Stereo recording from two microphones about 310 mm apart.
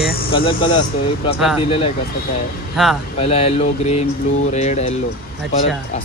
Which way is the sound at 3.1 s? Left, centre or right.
Centre.